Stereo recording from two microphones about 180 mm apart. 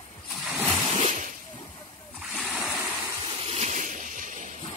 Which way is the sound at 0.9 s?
40° right (ahead or behind).